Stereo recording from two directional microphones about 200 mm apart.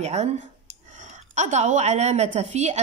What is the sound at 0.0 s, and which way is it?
Speech, 35° right (ahead or behind).